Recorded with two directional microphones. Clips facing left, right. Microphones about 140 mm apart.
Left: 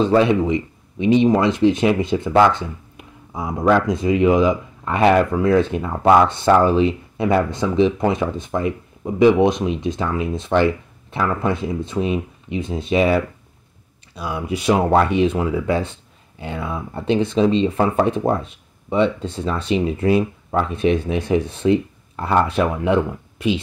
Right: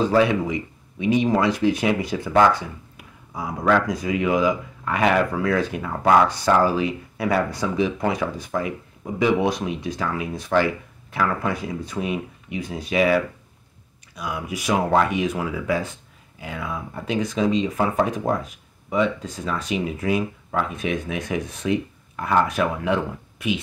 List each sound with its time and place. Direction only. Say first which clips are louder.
0.0 s speech: left 3 dB; 25° left (ahead or behind)